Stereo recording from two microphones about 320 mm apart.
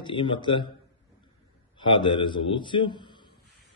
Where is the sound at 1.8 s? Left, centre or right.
Centre.